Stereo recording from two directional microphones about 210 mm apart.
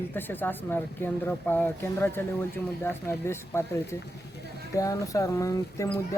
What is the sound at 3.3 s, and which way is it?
Speech, 10° left (ahead or behind).